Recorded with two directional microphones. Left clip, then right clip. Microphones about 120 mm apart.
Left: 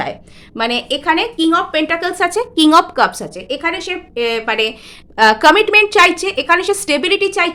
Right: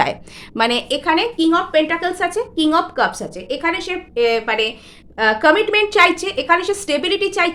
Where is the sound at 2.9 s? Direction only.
45° left (ahead or behind).